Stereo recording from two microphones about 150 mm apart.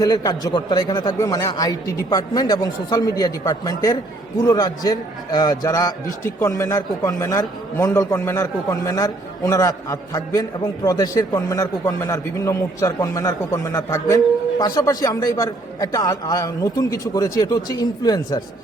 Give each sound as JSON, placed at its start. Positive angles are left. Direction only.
{"t": 0.0, "sound": "a man's voice", "side_deg": 25}